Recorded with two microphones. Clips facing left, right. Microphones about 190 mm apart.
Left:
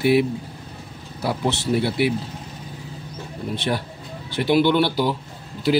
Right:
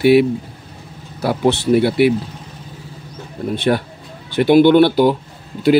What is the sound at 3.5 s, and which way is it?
Speech, 60° right (ahead or behind).